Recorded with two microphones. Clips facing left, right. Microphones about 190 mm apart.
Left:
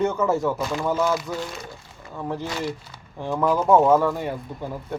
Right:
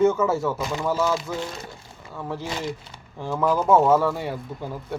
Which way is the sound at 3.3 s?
Centre (ahead or behind).